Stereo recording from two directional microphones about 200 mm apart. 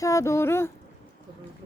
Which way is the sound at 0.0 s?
15° left (ahead or behind).